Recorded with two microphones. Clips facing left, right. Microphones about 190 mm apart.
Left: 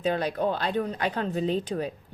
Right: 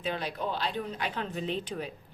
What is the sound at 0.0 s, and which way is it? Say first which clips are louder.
A woman's voice: left 7 dB; 45° left (ahead or behind).